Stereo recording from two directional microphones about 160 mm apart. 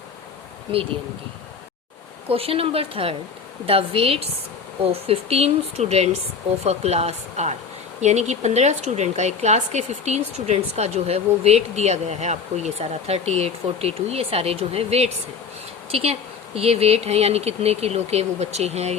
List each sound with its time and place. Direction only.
2.3 s a woman's voice: 35° right (ahead or behind)